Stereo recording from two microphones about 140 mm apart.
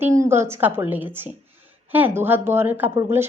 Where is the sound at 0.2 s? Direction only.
20° right (ahead or behind).